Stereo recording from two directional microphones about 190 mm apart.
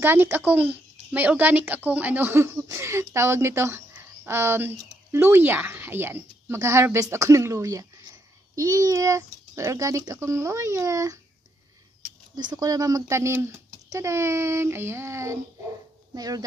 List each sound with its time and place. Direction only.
0.0 s speech: 10° right (ahead or behind)
12.4 s speech: 20° right (ahead or behind)